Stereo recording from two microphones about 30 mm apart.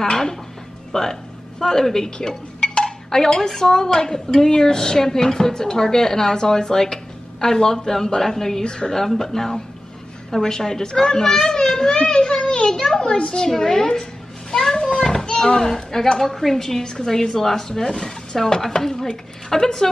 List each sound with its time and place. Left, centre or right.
0.0 s speech: centre
8.6 s speech: left
8.9 s speech: centre
11.9 s speech: left
13.3 s speech: centre
14.5 s a sound: centre
15.2 s speech: left
16.8 s speech: left